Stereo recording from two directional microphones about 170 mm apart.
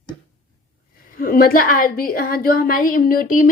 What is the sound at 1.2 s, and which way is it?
A woman's voice, 55° left (ahead or behind).